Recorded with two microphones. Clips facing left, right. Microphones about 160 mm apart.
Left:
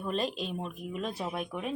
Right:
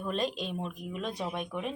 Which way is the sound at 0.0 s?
Centre (ahead or behind).